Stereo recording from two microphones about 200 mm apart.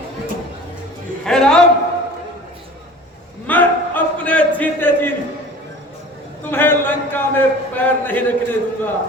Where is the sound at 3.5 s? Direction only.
10° left (ahead or behind).